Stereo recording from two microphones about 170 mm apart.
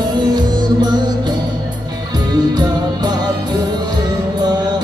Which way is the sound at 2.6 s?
25° right (ahead or behind).